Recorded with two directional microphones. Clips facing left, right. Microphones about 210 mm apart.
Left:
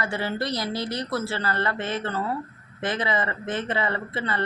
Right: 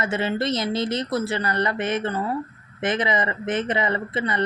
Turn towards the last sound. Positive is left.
turn(degrees=-20)  # may be behind; listen again after turning